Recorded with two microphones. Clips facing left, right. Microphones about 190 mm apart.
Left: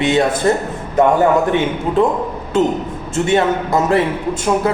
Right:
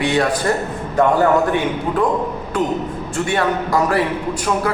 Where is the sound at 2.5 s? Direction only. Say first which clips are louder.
Left 4 dB; 25° left (ahead or behind).